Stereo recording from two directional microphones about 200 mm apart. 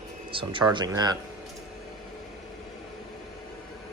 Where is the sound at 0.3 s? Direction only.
25° right (ahead or behind).